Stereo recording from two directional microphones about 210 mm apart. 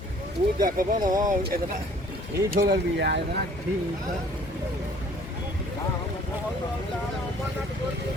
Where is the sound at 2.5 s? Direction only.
50° right (ahead or behind).